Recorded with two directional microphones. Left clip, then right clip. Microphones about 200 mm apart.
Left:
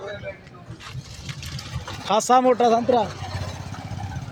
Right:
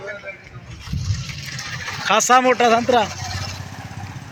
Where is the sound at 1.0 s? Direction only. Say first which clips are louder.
Right 9 dB; 55° left (ahead or behind).